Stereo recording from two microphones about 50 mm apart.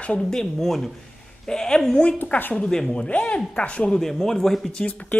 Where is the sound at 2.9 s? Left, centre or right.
Left.